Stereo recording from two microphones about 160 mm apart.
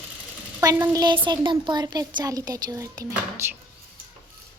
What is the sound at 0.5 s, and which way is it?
A woman's voice, 20° right (ahead or behind).